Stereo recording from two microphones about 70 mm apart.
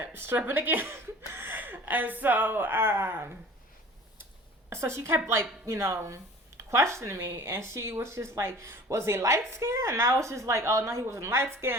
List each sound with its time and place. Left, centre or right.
0.0 s a sound: right
0.4 s speech: right
4.7 s speech: right